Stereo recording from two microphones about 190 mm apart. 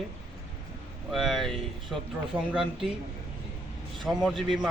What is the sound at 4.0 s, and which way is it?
Speech, centre (ahead or behind).